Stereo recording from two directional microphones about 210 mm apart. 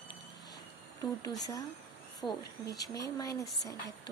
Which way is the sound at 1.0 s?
15° left (ahead or behind).